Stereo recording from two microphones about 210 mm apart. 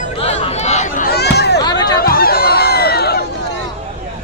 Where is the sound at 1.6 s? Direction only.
20° left (ahead or behind).